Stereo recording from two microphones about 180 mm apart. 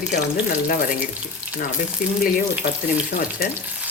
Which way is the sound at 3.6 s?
10° right (ahead or behind).